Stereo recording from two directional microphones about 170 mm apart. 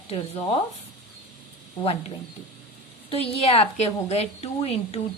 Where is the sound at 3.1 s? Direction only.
35° left (ahead or behind).